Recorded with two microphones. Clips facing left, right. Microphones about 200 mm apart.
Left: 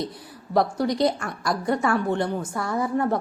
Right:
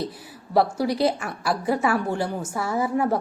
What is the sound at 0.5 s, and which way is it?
A woman's voice, 5° right (ahead or behind).